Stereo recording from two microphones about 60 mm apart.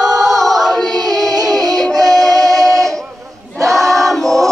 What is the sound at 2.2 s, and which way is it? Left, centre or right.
Music, right.